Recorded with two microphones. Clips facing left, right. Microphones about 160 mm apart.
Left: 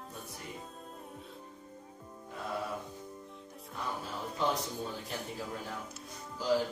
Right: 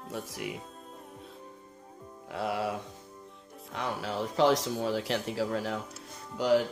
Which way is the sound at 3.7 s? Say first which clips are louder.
Right 6 dB; 90° right.